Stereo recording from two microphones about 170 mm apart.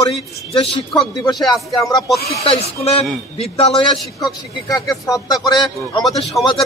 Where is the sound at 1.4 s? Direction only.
Centre (ahead or behind).